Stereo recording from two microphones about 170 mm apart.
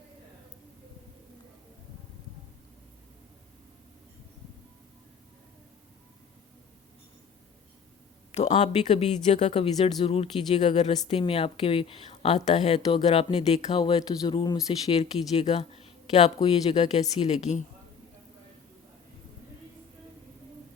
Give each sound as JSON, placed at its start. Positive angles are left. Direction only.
{"t": 8.3, "sound": "speech", "side_deg": 40}
{"t": 14.8, "sound": "speech", "side_deg": 35}
{"t": 15.8, "sound": "a sound", "side_deg": 40}
{"t": 16.4, "sound": "speech", "side_deg": 35}